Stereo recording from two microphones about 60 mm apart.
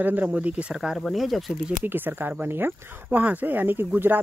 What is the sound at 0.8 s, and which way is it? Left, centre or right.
Speech, centre.